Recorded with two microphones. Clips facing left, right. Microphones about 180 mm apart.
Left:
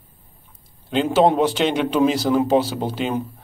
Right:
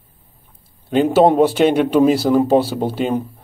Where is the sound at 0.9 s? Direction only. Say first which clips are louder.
Right 4 dB; 50° right (ahead or behind).